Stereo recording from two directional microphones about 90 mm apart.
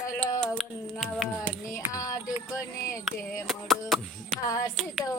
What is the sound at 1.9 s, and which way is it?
Music, 40° left (ahead or behind).